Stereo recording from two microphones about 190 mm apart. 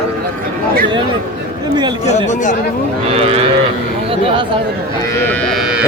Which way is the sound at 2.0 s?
40° left (ahead or behind).